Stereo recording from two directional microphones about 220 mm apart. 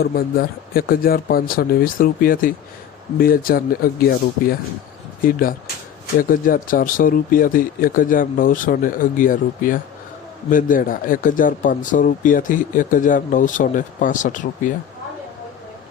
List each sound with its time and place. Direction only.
0.0 s speech: 45° left (ahead or behind)